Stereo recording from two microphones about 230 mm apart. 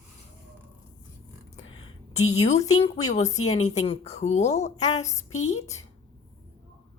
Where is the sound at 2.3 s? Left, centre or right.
Left.